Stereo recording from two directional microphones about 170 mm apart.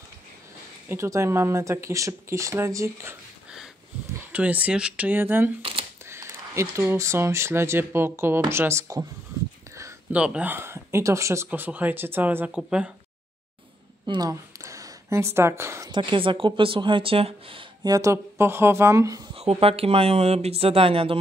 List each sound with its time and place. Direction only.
0.8 s speech: 15° right (ahead or behind)
4.3 s speech: 10° right (ahead or behind)
5.6 s a sound: 30° right (ahead or behind)
6.0 s speech: 15° right (ahead or behind)
10.1 s speech: 5° right (ahead or behind)
14.0 s a sound: 25° right (ahead or behind)
15.9 s speech: 30° right (ahead or behind)
19.3 s speech: 35° right (ahead or behind)